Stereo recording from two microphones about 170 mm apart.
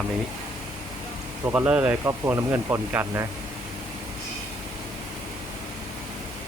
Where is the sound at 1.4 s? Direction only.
10° right (ahead or behind).